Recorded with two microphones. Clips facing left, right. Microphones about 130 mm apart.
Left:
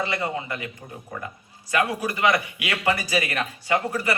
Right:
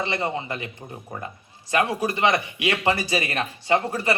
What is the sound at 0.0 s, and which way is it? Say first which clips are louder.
Speech: right 1 dB; 25° right (ahead or behind).